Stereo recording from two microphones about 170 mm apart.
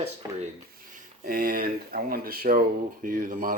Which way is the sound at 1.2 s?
60° right (ahead or behind).